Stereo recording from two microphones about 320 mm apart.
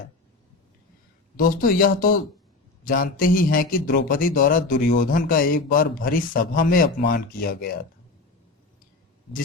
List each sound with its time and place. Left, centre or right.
1.4 s a man's voice: left